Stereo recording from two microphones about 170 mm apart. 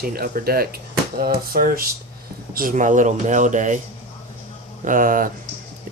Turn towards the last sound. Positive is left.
turn(degrees=-55)  # may be behind; listen again after turning